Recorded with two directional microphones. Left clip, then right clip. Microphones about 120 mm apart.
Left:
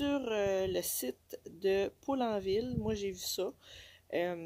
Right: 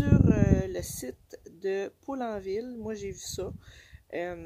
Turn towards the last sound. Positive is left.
turn(degrees=15)  # may be behind; listen again after turning